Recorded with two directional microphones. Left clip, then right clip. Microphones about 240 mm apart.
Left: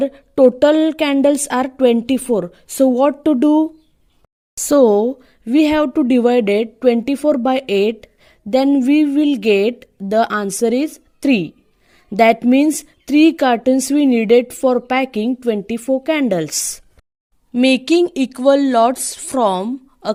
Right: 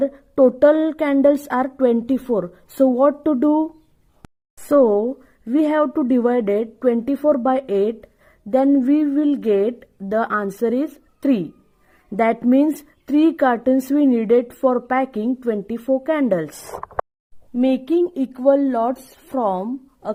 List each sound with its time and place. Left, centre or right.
0.0 s a woman's voice: left
4.7 s a woman's voice: left